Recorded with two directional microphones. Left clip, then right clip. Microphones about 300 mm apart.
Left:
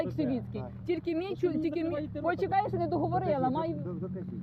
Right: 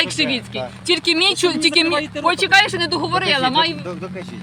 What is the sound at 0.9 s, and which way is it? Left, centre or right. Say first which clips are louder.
Speech: right 16 dB; centre.